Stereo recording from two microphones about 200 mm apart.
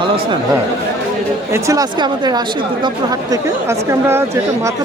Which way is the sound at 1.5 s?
15° right (ahead or behind).